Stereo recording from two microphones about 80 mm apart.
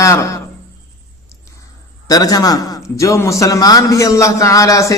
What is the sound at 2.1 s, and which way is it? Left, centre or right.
A man's voice, left.